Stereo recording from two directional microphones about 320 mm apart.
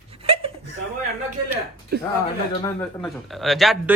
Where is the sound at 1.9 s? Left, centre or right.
Right.